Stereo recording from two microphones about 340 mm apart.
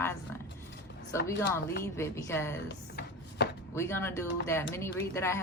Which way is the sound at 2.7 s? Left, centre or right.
Left.